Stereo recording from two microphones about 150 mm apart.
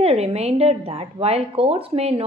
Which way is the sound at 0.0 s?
45° right (ahead or behind).